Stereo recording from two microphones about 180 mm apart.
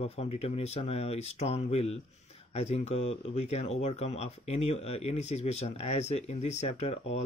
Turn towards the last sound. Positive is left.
turn(degrees=35)  # may be behind; listen again after turning